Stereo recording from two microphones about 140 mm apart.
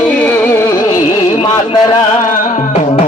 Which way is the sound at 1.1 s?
30° left (ahead or behind).